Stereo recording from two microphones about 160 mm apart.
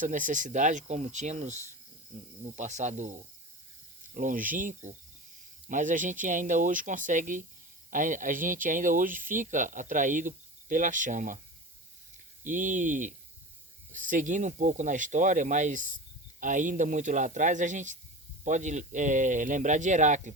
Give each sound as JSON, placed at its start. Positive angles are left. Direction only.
{"t": 0.0, "sound": "speech", "side_deg": -55}
{"t": 12.5, "sound": "speech", "side_deg": -55}